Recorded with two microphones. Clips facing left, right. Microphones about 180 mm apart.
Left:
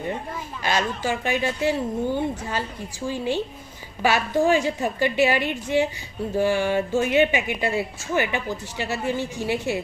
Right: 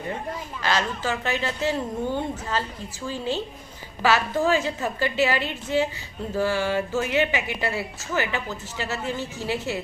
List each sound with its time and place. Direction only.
0.6 s a woman's voice: 15° left (ahead or behind)